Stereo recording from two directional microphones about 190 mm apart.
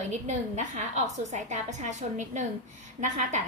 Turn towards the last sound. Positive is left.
turn(degrees=-40)  # may be behind; listen again after turning